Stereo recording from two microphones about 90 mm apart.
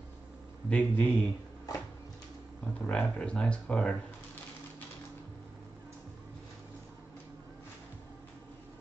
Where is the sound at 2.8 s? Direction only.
15° left (ahead or behind).